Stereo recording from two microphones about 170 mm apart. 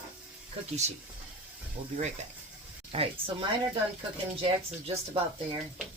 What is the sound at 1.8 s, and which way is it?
Speech, 35° right (ahead or behind).